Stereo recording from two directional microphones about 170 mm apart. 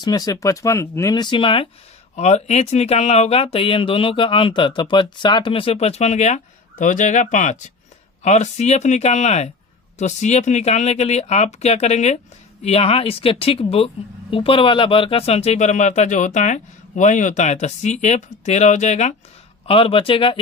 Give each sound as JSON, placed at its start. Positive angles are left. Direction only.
{"t": 0.0, "sound": "speech", "side_deg": 25}
{"t": 19.6, "sound": "speech", "side_deg": 30}